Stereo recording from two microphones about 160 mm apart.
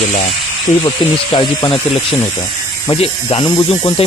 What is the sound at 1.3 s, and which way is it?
Speech, 30° left (ahead or behind).